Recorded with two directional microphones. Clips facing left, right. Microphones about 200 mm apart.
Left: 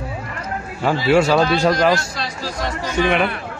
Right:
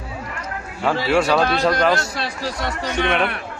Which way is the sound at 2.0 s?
60° right (ahead or behind).